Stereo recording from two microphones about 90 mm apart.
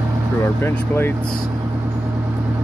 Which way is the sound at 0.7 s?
25° left (ahead or behind).